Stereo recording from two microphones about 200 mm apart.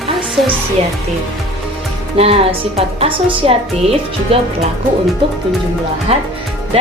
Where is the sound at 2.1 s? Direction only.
30° right (ahead or behind).